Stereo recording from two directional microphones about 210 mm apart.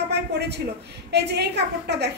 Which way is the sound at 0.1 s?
50° right (ahead or behind).